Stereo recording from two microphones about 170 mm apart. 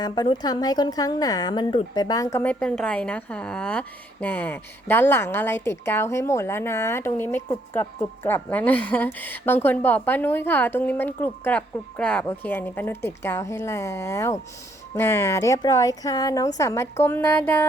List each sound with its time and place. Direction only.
0.0 s a woman's voice: 25° left (ahead or behind); by 17.7 s 10° left (ahead or behind)